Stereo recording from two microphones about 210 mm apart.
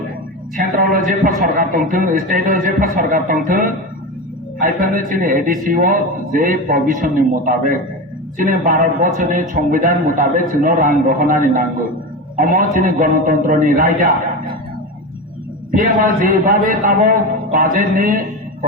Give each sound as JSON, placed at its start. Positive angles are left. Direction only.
{"t": 0.5, "sound": "a man's voice", "side_deg": -40}
{"t": 16.2, "sound": "a man's voice", "side_deg": -40}